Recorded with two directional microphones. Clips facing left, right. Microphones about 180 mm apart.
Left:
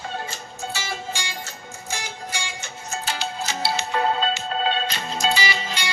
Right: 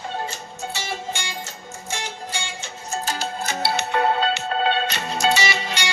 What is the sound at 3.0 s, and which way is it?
Music, 50° right (ahead or behind).